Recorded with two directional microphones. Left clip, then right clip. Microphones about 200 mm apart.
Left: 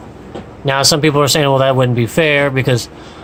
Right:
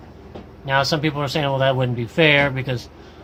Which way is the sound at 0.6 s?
40° left (ahead or behind).